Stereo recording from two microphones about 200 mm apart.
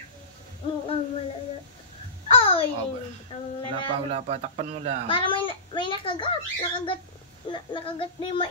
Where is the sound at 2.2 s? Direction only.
30° left (ahead or behind).